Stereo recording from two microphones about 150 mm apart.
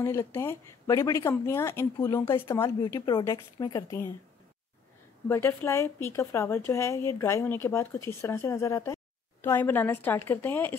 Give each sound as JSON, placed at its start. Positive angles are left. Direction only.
{"t": 0.0, "sound": "speech", "side_deg": 20}
{"t": 5.3, "sound": "a woman's voice", "side_deg": 15}